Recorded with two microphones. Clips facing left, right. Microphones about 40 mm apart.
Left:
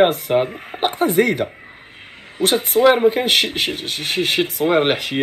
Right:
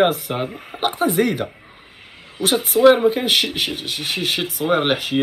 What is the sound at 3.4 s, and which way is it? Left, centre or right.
Speech, left.